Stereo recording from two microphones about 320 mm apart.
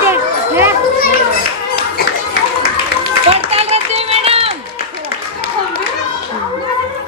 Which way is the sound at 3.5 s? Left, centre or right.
Centre.